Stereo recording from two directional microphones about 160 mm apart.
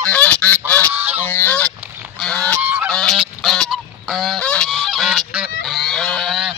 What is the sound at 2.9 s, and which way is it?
Goose, centre (ahead or behind).